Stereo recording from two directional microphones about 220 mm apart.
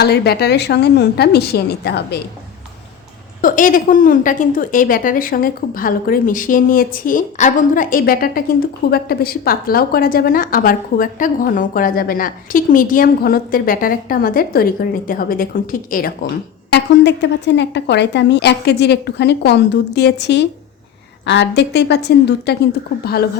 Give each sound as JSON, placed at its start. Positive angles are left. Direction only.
{"t": 0.0, "sound": "a woman's voice", "side_deg": 45}
{"t": 3.4, "sound": "a woman's voice", "side_deg": 40}